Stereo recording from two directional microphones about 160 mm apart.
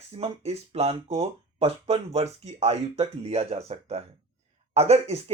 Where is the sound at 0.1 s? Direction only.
40° right (ahead or behind).